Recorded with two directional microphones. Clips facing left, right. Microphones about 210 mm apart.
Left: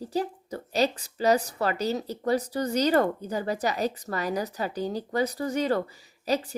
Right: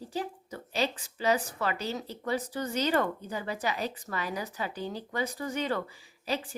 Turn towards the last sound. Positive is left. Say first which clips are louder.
# left 6 dB
turn(degrees=40)  # may be behind; listen again after turning